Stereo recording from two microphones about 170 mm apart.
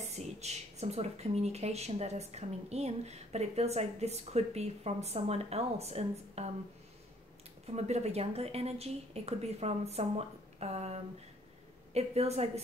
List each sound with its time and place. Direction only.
0.0 s speech: 40° right (ahead or behind)
7.6 s speech: 40° right (ahead or behind)